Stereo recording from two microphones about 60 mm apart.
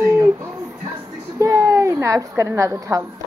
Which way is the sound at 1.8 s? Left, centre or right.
Right.